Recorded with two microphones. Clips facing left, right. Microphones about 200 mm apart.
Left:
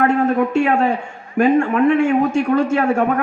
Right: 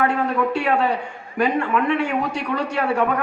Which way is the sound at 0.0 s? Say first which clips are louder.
Left 5 dB; 45° left (ahead or behind).